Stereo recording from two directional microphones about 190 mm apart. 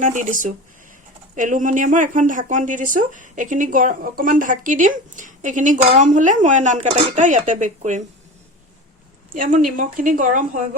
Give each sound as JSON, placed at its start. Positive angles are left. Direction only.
{"t": 0.0, "sound": "speech", "side_deg": -40}
{"t": 9.3, "sound": "speech", "side_deg": -45}